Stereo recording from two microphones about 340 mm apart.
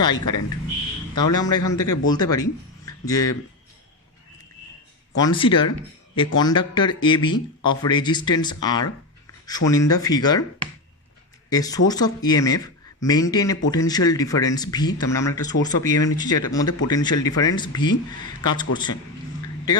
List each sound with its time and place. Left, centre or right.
0.0 s speech: centre
5.1 s speech: centre
11.4 s speech: centre